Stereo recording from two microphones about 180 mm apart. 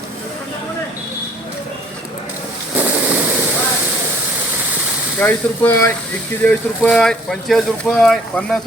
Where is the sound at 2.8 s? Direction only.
10° right (ahead or behind).